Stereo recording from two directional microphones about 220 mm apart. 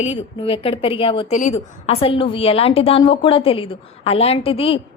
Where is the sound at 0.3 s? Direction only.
25° left (ahead or behind).